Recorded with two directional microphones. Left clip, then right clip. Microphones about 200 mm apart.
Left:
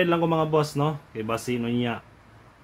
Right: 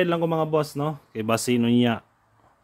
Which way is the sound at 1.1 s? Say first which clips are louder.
Right 4 dB; 55° right (ahead or behind).